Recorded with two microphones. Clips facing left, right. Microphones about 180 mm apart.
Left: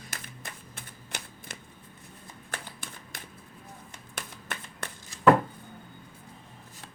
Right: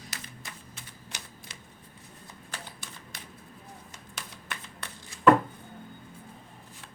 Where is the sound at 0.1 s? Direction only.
55° left (ahead or behind).